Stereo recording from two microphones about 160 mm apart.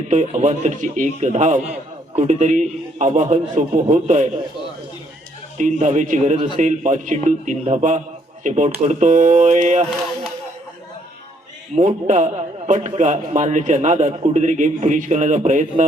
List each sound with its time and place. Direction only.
0.1 s a man's voice: 50° right (ahead or behind)
5.5 s a man's voice: 50° right (ahead or behind)
11.7 s a man's voice: 50° right (ahead or behind)